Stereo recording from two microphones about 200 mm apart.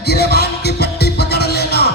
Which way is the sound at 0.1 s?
55° left (ahead or behind).